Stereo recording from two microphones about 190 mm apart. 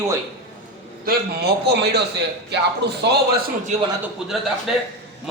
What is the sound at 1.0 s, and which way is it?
A man's voice, 60° right (ahead or behind).